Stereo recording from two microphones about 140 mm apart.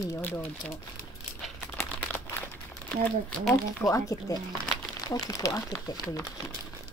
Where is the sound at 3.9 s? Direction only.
25° left (ahead or behind).